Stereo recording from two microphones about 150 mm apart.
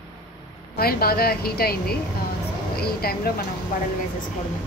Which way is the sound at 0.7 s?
90° left.